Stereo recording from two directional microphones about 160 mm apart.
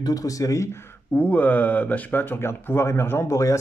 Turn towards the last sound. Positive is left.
turn(degrees=20)  # may be behind; listen again after turning